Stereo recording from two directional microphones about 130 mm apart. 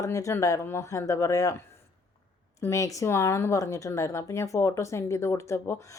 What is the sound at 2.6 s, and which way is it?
A woman's voice, 25° left (ahead or behind).